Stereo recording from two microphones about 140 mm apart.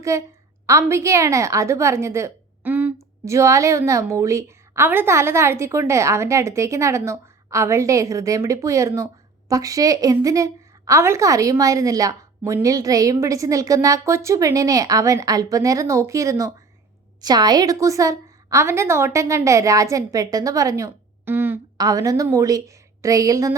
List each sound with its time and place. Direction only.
0.1 s a woman's voice: 20° right (ahead or behind)
21.8 s a woman's voice: 25° right (ahead or behind)